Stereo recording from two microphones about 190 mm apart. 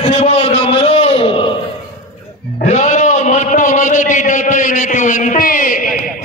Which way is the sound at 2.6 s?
40° left (ahead or behind).